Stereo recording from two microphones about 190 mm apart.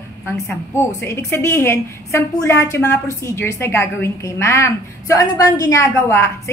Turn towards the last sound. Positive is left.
turn(degrees=15)  # may be behind; listen again after turning